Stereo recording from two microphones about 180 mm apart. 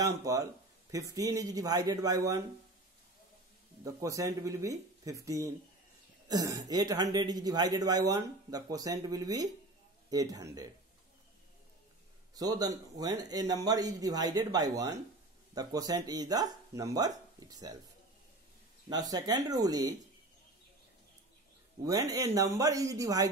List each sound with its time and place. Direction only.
0.0 s speech: 20° right (ahead or behind)
3.8 s speech: 20° right (ahead or behind)
12.4 s speech: 20° right (ahead or behind)
18.9 s speech: 20° right (ahead or behind)
22.1 s speech: 20° right (ahead or behind)